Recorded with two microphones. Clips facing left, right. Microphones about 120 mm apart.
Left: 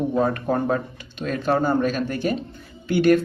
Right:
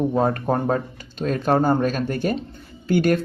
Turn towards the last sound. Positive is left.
turn(degrees=-40)  # may be behind; listen again after turning